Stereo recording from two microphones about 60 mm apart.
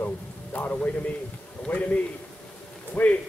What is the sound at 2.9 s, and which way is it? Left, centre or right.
Speech, left.